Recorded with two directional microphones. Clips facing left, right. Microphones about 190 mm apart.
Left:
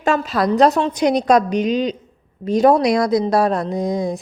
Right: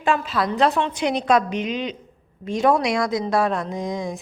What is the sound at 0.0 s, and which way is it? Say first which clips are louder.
Speech: left 4 dB; 45° left (ahead or behind).